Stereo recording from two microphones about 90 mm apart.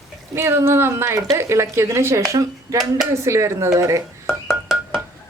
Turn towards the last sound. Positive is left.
turn(degrees=0)  # may be behind; listen again after turning